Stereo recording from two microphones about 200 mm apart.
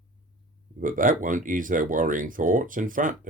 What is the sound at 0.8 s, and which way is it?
Speech, 45° right (ahead or behind).